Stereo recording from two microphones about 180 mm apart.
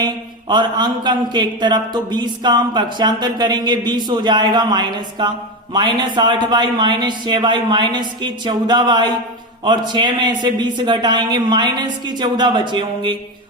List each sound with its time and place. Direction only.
0.0 s speech: 25° right (ahead or behind)